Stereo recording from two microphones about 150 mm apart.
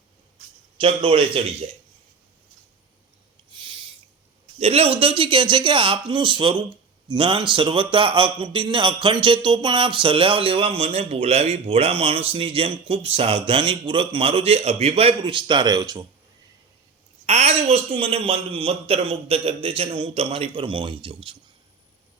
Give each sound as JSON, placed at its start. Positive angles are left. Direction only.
{"t": 0.8, "sound": "a man's voice", "side_deg": -35}
{"t": 3.5, "sound": "owl", "side_deg": -35}
{"t": 4.5, "sound": "a man's voice", "side_deg": -45}
{"t": 17.2, "sound": "a man's voice", "side_deg": -45}